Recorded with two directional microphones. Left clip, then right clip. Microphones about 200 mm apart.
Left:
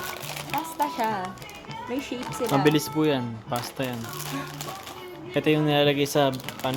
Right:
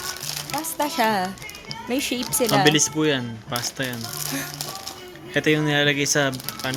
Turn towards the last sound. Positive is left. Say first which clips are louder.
# even
turn(degrees=0)  # may be behind; listen again after turning